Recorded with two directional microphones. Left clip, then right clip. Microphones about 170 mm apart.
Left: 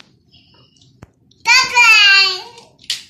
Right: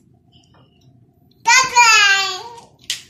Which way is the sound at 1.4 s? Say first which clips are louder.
Left 1 dB; 20° right (ahead or behind).